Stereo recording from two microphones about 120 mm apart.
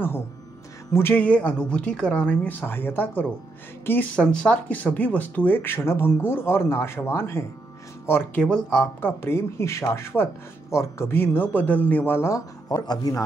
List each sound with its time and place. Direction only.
0.9 s speech: 15° left (ahead or behind)
8.5 s speech: 5° left (ahead or behind)
9.2 s speech: 20° left (ahead or behind)